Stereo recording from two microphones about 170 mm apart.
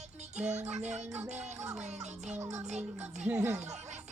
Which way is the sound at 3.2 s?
15° right (ahead or behind).